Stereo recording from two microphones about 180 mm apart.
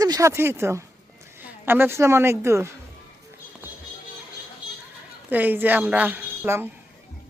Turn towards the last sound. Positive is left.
turn(degrees=-10)  # may be behind; listen again after turning